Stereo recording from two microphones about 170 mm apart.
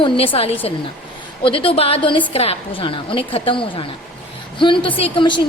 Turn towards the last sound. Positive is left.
turn(degrees=25)  # may be behind; listen again after turning